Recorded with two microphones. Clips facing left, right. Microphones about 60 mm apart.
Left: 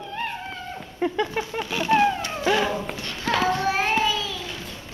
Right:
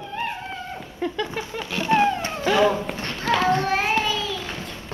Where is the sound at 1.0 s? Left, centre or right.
Centre.